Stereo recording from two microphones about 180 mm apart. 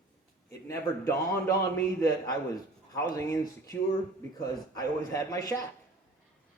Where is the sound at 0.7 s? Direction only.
15° left (ahead or behind).